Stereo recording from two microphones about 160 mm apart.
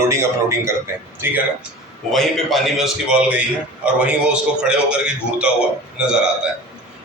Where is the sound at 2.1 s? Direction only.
Centre (ahead or behind).